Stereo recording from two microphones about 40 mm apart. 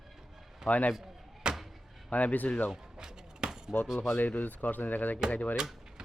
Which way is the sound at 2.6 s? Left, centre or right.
Centre.